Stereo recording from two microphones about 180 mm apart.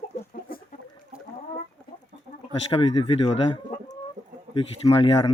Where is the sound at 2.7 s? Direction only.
30° left (ahead or behind).